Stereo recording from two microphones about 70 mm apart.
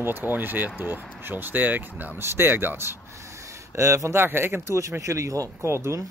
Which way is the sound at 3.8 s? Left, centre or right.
Right.